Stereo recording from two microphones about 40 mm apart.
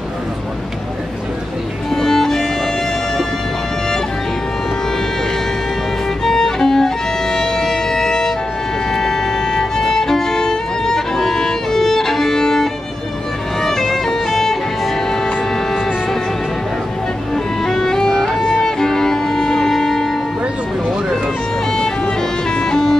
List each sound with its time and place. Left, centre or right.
1.9 s music: centre
6.2 s violin: centre
13.6 s music: centre
17.6 s music: centre
22.5 s music: centre